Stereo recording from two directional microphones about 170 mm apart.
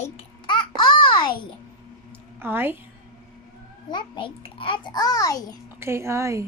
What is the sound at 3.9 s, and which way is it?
A child's voice, 25° left (ahead or behind).